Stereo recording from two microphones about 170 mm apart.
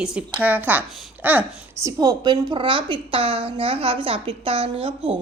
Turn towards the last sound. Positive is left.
turn(degrees=-35)  # may be behind; listen again after turning